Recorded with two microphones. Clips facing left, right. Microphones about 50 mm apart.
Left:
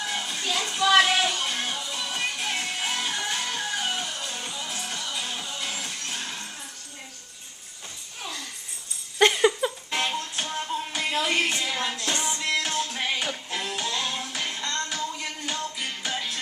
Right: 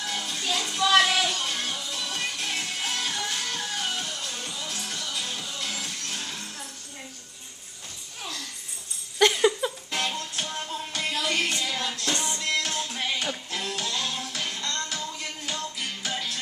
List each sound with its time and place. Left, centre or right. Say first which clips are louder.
0.0 s music: left 1 dB; centre
9.2 s a sound: left 1 dB; centre
9.9 s music: left 2 dB; centre
11.1 s music: left 2 dB; left